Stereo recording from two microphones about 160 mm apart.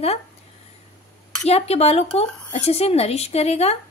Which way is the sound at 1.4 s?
40° left (ahead or behind).